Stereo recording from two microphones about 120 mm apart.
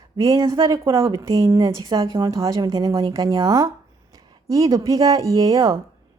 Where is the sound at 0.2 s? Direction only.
25° right (ahead or behind).